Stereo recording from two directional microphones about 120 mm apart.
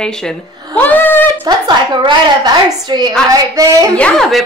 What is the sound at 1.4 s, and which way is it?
A woman's voice, 35° right (ahead or behind).